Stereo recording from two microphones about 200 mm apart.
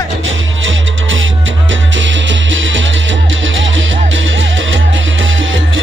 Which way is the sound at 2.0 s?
70° right (ahead or behind).